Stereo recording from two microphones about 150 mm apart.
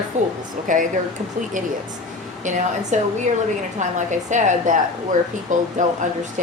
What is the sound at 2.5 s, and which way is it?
A woman's voice, 55° right (ahead or behind).